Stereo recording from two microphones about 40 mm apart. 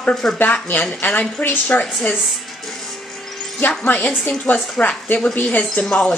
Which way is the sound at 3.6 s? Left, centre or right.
Left.